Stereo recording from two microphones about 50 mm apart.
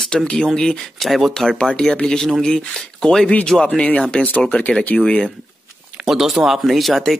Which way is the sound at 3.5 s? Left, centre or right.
Centre.